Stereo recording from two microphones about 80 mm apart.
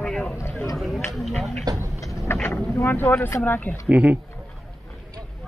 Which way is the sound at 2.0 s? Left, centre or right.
Left.